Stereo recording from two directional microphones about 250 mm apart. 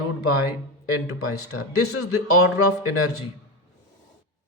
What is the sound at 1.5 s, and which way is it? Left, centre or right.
Speech, left.